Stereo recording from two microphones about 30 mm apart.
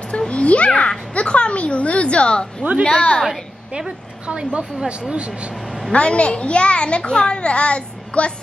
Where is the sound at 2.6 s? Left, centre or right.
Right.